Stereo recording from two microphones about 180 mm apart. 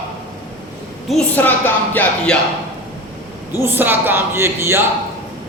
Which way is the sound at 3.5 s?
10° right (ahead or behind).